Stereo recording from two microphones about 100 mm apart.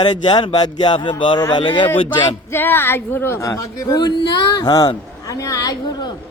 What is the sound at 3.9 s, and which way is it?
A woman's voice, 45° left (ahead or behind).